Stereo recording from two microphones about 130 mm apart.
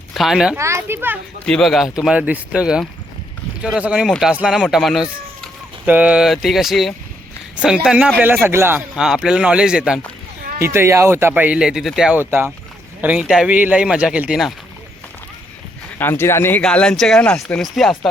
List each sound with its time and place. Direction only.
0.1 s speech: centre (ahead or behind)
0.5 s a child's voice: 20° right (ahead or behind)
1.5 s speech: centre (ahead or behind)
5.8 s speech: 10° right (ahead or behind)
9.0 s speech: 5° right (ahead or behind)
10.6 s speech: 20° right (ahead or behind); by 12.2 s 5° right (ahead or behind)
12.2 s speech: 20° right (ahead or behind)
16.0 s speech: 15° left (ahead or behind); by 18.1 s centre (ahead or behind)